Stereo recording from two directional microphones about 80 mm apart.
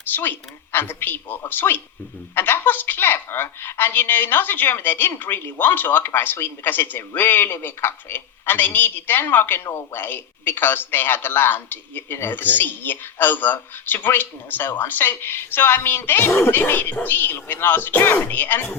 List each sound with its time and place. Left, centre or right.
0.0 s a man's voice: left